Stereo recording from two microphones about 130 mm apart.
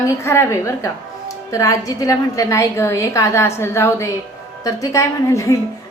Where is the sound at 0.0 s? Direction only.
20° left (ahead or behind).